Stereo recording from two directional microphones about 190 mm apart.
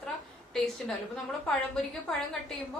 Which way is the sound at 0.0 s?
5° left (ahead or behind).